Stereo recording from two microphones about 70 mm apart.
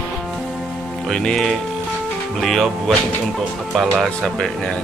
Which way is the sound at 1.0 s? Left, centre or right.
Centre.